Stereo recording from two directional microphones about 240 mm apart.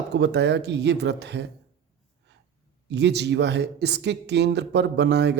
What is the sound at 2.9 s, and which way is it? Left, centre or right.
Speech, right.